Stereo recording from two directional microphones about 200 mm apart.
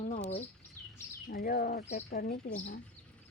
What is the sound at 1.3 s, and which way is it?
Speech, 50° left (ahead or behind).